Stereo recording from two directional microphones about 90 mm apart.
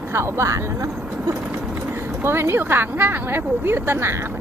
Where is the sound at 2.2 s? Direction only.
25° right (ahead or behind).